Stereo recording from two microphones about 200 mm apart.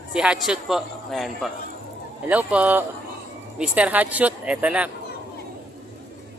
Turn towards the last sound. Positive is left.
turn(degrees=-5)  # may be behind; listen again after turning